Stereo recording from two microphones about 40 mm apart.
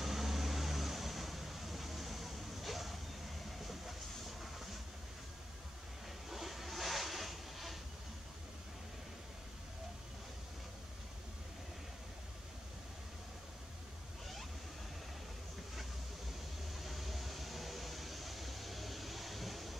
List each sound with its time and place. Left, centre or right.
0.0 s vehicle: centre
6.3 s vehicle: centre
16.7 s vehicle: centre